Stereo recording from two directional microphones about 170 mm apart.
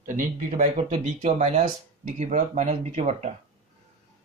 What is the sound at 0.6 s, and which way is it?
Speech, 45° right (ahead or behind).